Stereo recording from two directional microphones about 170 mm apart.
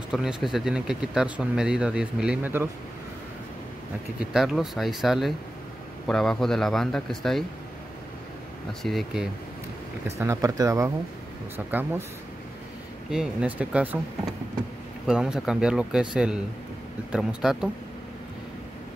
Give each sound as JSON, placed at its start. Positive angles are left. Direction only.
{"t": 0.1, "sound": "speech", "side_deg": 0}
{"t": 4.2, "sound": "speech", "side_deg": -5}
{"t": 8.8, "sound": "speech", "side_deg": 0}
{"t": 10.0, "sound": "speech", "side_deg": -15}
{"t": 13.1, "sound": "speech", "side_deg": -5}
{"t": 17.1, "sound": "speech", "side_deg": -5}